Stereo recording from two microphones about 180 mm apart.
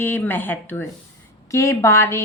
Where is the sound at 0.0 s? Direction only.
10° left (ahead or behind).